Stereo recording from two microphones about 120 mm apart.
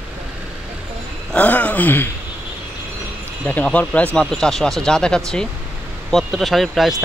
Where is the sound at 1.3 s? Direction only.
15° left (ahead or behind).